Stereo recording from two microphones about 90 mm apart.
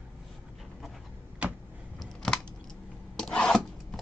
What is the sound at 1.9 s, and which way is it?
Computer keyboard, 10° left (ahead or behind).